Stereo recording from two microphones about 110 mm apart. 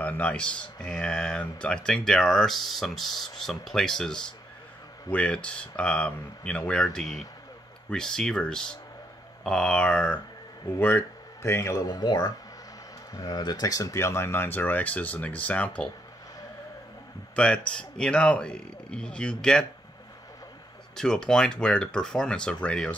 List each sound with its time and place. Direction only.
0.0 s speech: 15° left (ahead or behind)
17.4 s speech: 10° left (ahead or behind)
20.9 s speech: 5° left (ahead or behind)